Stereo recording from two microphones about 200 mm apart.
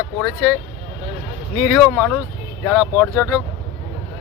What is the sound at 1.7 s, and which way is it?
Speech, 10° left (ahead or behind).